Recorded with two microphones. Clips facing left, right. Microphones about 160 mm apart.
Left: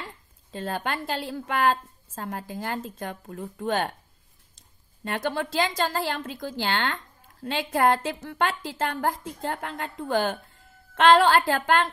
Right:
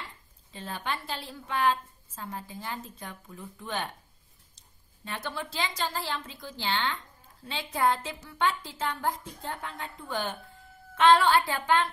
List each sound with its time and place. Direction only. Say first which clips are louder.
0.6 s a woman's voice: left 5 dB; 50° left (ahead or behind)
2.3 s a woman's voice: left 6 dB; 70° left (ahead or behind)
3.0 s a woman's voice: left 8 dB; 50° left (ahead or behind)
4.6 s a sound: left 10 dB; 85° left
5.8 s a woman's voice: left 6 dB; 50° left (ahead or behind)
6.4 s a woman's voice: left 4 dB; 65° left (ahead or behind); by 11.7 s 90° left